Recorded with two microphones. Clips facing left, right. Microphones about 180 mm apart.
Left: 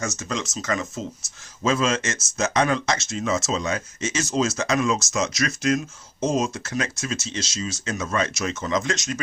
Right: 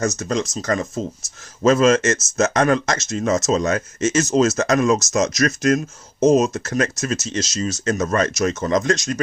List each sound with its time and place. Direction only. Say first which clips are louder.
0.0 s speech: right 7 dB; 40° right (ahead or behind)